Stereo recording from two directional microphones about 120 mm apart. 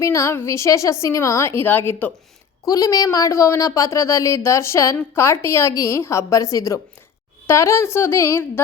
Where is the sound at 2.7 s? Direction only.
30° left (ahead or behind).